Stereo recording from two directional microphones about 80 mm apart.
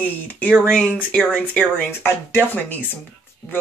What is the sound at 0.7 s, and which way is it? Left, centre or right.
Speech, centre.